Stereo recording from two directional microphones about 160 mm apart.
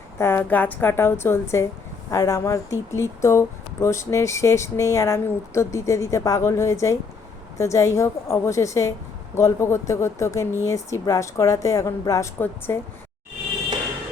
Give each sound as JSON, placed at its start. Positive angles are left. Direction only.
{"t": 0.2, "sound": "a woman's voice", "side_deg": 15}